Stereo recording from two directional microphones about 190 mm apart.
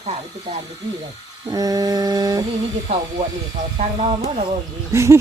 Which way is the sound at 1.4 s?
20° right (ahead or behind).